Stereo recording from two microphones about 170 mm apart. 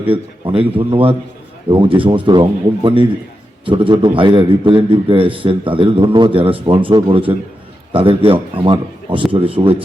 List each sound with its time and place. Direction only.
0.1 s a man's voice: 30° right (ahead or behind)